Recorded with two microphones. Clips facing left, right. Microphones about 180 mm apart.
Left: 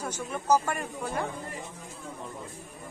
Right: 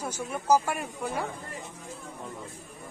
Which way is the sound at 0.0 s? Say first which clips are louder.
Right 1 dB; 10° right (ahead or behind).